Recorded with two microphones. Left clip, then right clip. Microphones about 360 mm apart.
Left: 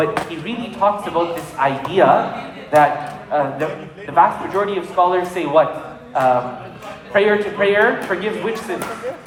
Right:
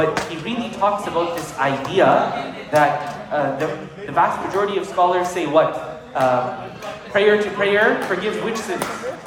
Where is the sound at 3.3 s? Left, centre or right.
Centre.